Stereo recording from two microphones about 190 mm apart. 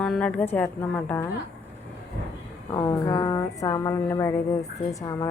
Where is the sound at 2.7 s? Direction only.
15° left (ahead or behind).